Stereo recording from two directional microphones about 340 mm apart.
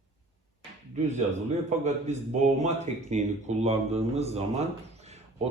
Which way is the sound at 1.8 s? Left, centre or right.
Centre.